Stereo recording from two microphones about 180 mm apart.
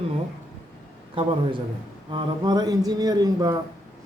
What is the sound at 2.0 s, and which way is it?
A man's voice, 25° right (ahead or behind).